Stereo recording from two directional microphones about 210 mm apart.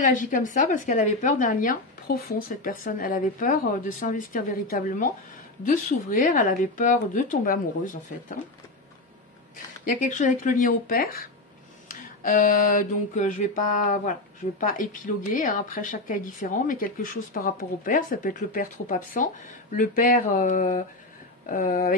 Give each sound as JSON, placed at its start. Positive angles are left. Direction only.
{"t": 0.0, "sound": "speech", "side_deg": 40}
{"t": 9.9, "sound": "speech", "side_deg": 40}